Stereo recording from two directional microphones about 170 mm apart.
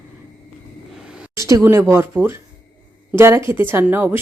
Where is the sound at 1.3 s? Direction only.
20° right (ahead or behind).